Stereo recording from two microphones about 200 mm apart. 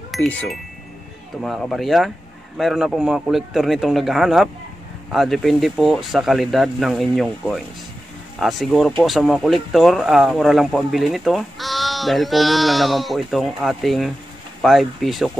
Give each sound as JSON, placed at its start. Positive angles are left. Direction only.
{"t": 0.1, "sound": "speech", "side_deg": 5}